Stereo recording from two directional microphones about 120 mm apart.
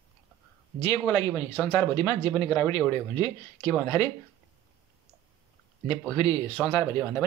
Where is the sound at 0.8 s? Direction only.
25° left (ahead or behind).